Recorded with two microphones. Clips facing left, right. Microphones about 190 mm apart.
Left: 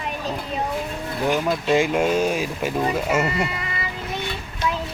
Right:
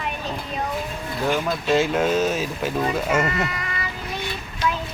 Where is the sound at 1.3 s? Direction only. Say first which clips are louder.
Left 1 dB; 15° left (ahead or behind).